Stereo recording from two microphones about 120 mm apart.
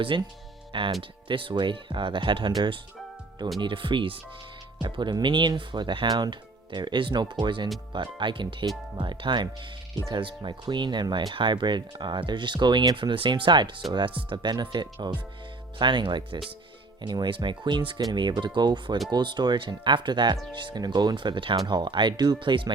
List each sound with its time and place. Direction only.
0.0 s speech: 45° right (ahead or behind)